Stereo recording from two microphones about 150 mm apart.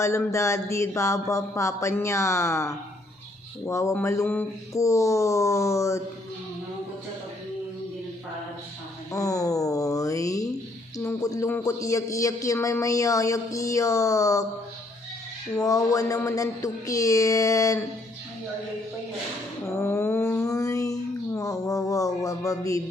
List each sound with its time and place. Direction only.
0.0 s a man's voice: 20° left (ahead or behind)
9.1 s a man's voice: 20° left (ahead or behind)
15.6 s a man's voice: 25° left (ahead or behind)
19.6 s a sound: 15° left (ahead or behind)
20.5 s music: 20° left (ahead or behind)
21.3 s a man's voice: 20° left (ahead or behind)